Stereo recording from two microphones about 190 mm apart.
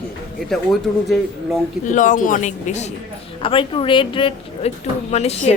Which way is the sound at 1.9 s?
40° left (ahead or behind).